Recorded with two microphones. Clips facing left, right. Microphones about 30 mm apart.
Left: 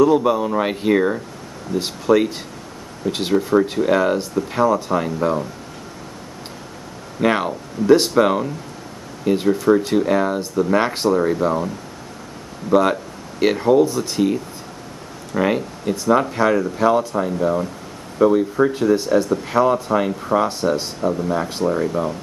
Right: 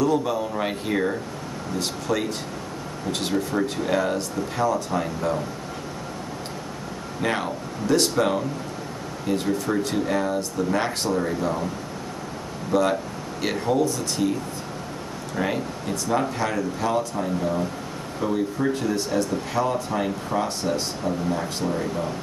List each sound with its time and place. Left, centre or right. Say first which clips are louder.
0.0 s speech: left 7 dB; left
7.2 s speech: left 7 dB; centre
12.7 s speech: left 5 dB; left; by 19.4 s centre
19.5 s speech: left 9 dB; centre
21.8 s speech: left 6 dB; centre